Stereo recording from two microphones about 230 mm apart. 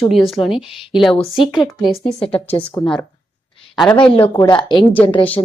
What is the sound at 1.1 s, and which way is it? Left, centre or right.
Speech, left.